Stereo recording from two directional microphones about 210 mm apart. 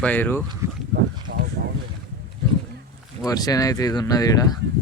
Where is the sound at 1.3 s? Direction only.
55° right (ahead or behind).